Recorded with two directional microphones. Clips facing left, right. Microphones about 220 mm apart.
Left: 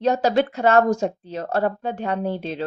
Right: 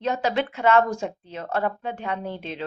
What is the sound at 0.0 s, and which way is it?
Speech, 40° left (ahead or behind).